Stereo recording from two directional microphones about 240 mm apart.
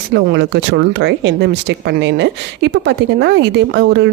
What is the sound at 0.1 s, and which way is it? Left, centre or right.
Speech, right.